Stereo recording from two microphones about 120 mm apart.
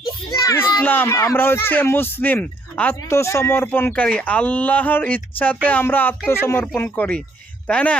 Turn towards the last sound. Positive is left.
turn(degrees=10)  # may be behind; listen again after turning